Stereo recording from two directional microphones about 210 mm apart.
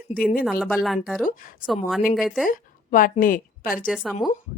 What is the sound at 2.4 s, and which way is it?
A woman's voice, 40° left (ahead or behind).